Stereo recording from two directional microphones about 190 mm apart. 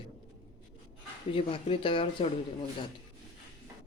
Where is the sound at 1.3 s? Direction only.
30° left (ahead or behind).